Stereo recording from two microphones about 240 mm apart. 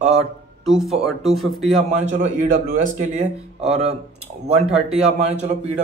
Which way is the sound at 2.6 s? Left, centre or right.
Right.